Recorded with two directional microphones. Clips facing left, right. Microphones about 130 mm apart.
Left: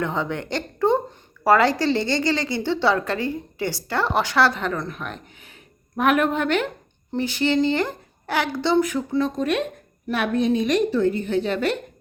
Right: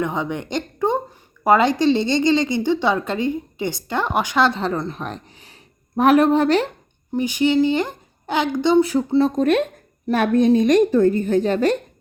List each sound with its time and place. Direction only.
0.0 s speech: 15° right (ahead or behind); by 6.7 s 35° right (ahead or behind)
7.1 s a woman's voice: 15° right (ahead or behind)
8.8 s speech: 30° right (ahead or behind)
9.3 s a woman's voice: 45° right (ahead or behind)